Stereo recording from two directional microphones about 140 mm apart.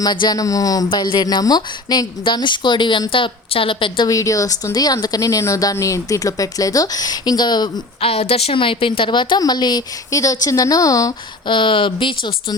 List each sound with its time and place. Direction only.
0.0 s speech: 30° left (ahead or behind)
4.1 s speech: 25° left (ahead or behind)
8.1 s speech: 45° left (ahead or behind)